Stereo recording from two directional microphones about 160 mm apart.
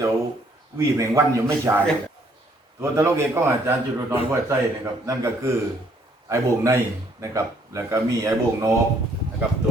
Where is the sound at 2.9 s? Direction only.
15° right (ahead or behind).